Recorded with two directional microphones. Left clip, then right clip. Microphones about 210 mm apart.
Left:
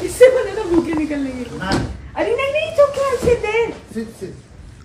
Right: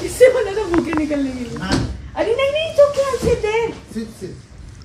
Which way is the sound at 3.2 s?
Centre (ahead or behind).